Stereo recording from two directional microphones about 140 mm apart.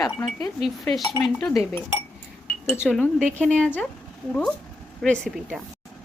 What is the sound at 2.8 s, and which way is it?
Speech, 5° left (ahead or behind).